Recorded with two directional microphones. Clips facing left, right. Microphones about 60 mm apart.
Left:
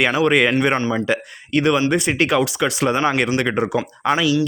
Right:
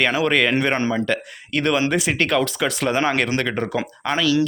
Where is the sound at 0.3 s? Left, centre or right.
Centre.